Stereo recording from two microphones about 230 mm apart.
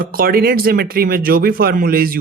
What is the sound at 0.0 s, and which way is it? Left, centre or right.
Speech, right.